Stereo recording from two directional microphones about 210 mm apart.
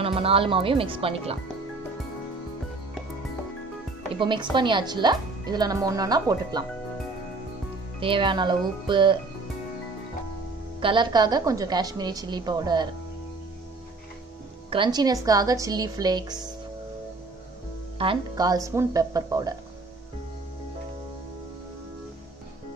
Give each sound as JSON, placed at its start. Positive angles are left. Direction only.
{"t": 0.0, "sound": "speech", "side_deg": -25}
{"t": 4.1, "sound": "speech", "side_deg": -25}
{"t": 8.0, "sound": "speech", "side_deg": -25}
{"t": 10.8, "sound": "speech", "side_deg": -25}
{"t": 14.7, "sound": "speech", "side_deg": -20}
{"t": 17.9, "sound": "speech", "side_deg": -20}